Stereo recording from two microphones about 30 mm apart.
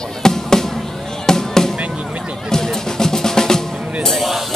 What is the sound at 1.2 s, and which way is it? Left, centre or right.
Music, centre.